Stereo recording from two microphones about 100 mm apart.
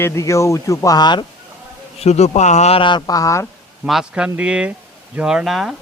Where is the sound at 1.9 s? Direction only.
90° left.